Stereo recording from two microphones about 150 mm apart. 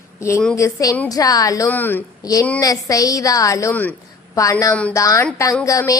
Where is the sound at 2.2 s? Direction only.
25° left (ahead or behind).